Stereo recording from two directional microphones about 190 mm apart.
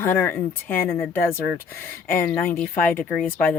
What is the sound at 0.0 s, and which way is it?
Speech, 10° left (ahead or behind).